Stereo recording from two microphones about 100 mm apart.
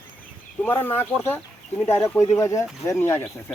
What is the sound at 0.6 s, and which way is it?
Speech, 20° left (ahead or behind).